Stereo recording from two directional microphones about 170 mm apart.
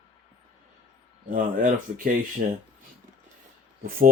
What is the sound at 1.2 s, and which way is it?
Speech, 50° right (ahead or behind).